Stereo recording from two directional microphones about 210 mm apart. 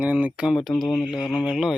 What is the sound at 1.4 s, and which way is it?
Speech, 5° right (ahead or behind).